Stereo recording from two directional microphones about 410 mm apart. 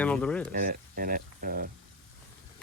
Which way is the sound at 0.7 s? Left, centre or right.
Right.